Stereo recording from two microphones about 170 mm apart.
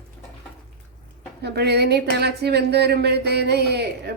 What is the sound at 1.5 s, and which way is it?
Speech, 75° right (ahead or behind).